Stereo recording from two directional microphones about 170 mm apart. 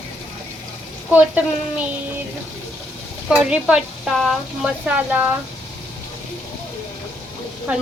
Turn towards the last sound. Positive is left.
turn(degrees=-10)  # may be behind; listen again after turning